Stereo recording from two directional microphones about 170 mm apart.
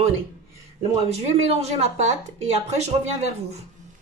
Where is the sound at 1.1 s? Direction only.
35° right (ahead or behind).